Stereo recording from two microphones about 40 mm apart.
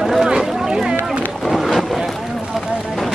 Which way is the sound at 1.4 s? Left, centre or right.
Centre.